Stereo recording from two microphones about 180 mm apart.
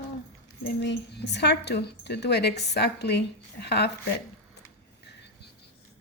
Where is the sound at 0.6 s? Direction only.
70° left (ahead or behind).